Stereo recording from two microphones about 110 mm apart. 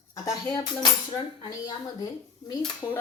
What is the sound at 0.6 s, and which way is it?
Speech, 45° left (ahead or behind).